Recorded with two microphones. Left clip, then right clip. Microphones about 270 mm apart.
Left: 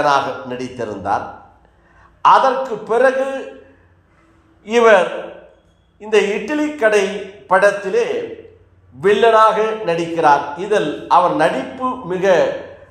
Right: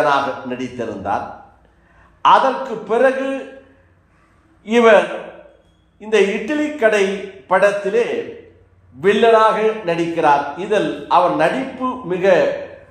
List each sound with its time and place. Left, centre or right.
0.0 s a man's voice: left
2.2 s a man's voice: centre
4.6 s a man's voice: centre